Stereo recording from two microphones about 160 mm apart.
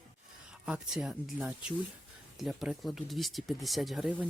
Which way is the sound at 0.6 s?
5° right (ahead or behind).